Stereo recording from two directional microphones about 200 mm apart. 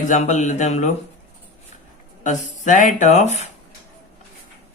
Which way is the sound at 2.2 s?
40° left (ahead or behind).